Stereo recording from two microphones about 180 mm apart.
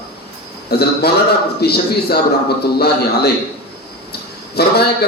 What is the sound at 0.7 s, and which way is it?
Speech, 60° left (ahead or behind).